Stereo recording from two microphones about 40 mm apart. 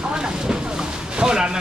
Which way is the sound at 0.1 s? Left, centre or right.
Centre.